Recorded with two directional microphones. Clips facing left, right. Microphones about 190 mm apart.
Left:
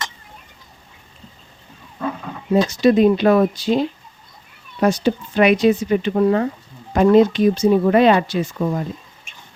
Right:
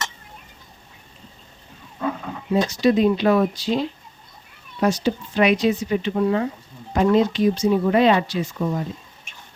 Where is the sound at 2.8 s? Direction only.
55° left (ahead or behind).